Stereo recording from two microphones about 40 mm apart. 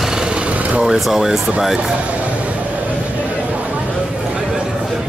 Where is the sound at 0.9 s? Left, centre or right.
Centre.